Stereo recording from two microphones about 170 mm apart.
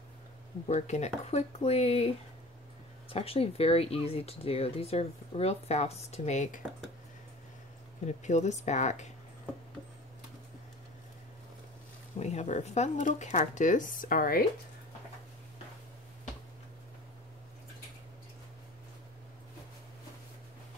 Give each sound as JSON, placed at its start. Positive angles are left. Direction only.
{"t": 0.7, "sound": "speech", "side_deg": 45}
{"t": 3.1, "sound": "speech", "side_deg": 35}
{"t": 8.0, "sound": "speech", "side_deg": 45}
{"t": 12.2, "sound": "speech", "side_deg": 40}